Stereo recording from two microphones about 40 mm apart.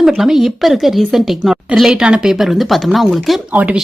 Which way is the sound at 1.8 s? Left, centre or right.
Right.